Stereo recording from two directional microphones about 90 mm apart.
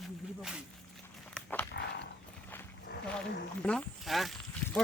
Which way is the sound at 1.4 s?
10° left (ahead or behind).